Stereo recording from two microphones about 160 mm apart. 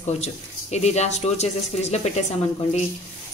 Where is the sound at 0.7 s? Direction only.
45° left (ahead or behind).